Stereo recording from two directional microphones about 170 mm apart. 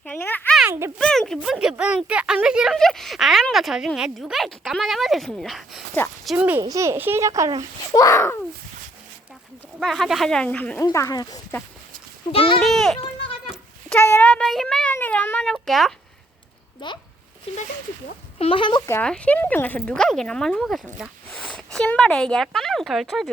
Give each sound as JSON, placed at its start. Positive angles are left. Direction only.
{"t": 0.0, "sound": "speech", "side_deg": 10}
{"t": 0.7, "sound": "speech", "side_deg": -20}
{"t": 0.9, "sound": "a child's voice", "side_deg": 5}
{"t": 7.9, "sound": "cat", "side_deg": 20}
{"t": 9.8, "sound": "speech", "side_deg": 0}
{"t": 10.8, "sound": "speech", "side_deg": 20}
{"t": 12.3, "sound": "speech", "side_deg": 35}
{"t": 12.6, "sound": "speech", "side_deg": 0}
{"t": 13.9, "sound": "cat", "side_deg": 10}
{"t": 15.5, "sound": "speech", "side_deg": 0}
{"t": 16.8, "sound": "speech", "side_deg": 30}
{"t": 18.3, "sound": "speech", "side_deg": 30}
{"t": 18.9, "sound": "speech", "side_deg": 10}